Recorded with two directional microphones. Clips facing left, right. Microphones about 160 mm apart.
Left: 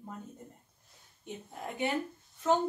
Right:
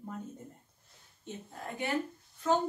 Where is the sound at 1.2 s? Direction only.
20° left (ahead or behind).